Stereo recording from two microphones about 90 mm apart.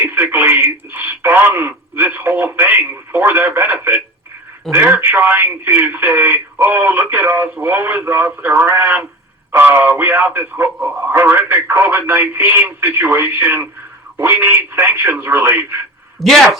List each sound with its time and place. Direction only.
0.0 s speech: 25° right (ahead or behind)
16.2 s speech: centre (ahead or behind)